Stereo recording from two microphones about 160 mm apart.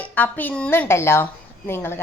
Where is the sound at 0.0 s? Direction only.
10° left (ahead or behind).